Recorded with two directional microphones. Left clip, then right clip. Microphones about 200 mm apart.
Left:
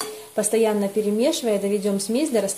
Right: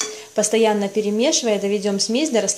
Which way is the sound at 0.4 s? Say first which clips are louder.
Right 3 dB; 5° right (ahead or behind).